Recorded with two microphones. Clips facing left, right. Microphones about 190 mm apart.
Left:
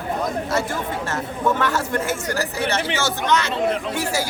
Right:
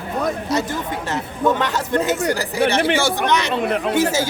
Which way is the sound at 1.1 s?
20° right (ahead or behind).